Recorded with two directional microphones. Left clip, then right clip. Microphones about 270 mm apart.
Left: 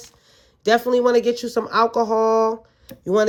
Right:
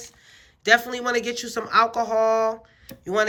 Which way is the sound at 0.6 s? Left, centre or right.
Centre.